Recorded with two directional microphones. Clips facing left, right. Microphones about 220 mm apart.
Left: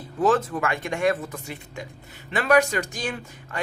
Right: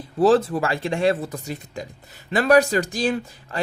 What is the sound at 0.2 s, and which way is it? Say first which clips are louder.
Speech: right 5 dB; 35° right (ahead or behind).